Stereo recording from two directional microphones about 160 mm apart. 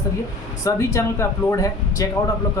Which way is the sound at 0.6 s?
20° left (ahead or behind).